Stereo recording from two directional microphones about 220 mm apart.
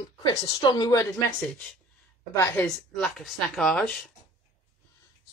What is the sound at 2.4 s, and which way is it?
Speech, 15° left (ahead or behind).